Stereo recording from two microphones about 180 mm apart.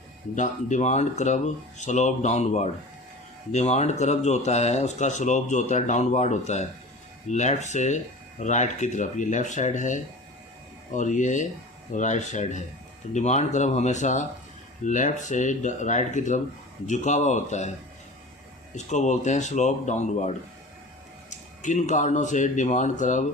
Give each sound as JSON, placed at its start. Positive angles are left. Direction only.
{"t": 0.3, "sound": "speech", "side_deg": 45}
{"t": 18.9, "sound": "speech", "side_deg": 40}